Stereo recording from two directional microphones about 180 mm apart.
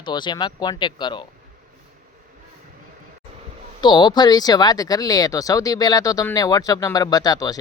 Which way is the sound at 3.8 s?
25° left (ahead or behind).